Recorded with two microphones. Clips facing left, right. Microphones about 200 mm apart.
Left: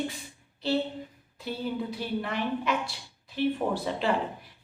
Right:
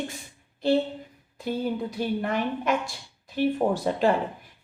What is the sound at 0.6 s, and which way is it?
A woman's voice, 50° right (ahead or behind).